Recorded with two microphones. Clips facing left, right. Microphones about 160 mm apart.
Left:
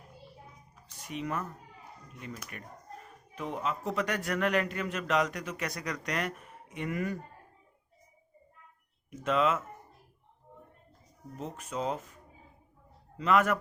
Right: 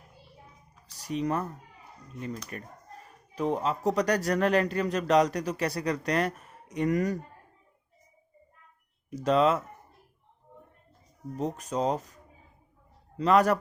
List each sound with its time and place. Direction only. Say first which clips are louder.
0.9 s a sound: right 6 dB; 35° right (ahead or behind)
2.1 s a man's voice: right 7 dB; 35° right (ahead or behind)
9.0 s a man's voice: right 5 dB; 35° right (ahead or behind)
11.3 s a man's voice: right 6 dB; 40° right (ahead or behind)